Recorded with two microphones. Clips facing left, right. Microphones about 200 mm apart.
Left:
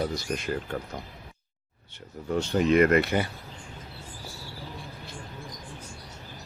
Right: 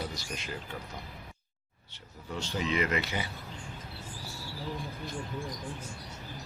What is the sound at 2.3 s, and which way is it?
Speech, 55° left (ahead or behind).